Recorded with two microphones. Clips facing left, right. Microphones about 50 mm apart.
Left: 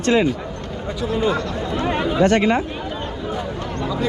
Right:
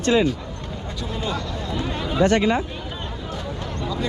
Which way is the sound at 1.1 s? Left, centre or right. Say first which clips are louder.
Left 8 dB; centre.